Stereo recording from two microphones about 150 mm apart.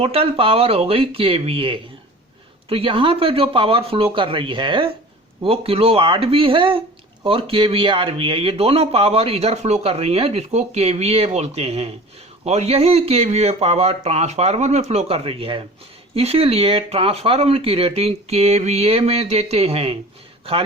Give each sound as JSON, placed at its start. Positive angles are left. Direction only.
{"t": 0.0, "sound": "speech", "side_deg": -40}